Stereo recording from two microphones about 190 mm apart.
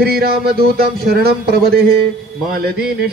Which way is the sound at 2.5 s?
55° right (ahead or behind).